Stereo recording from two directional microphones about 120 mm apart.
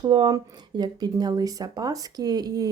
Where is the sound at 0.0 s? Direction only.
40° right (ahead or behind).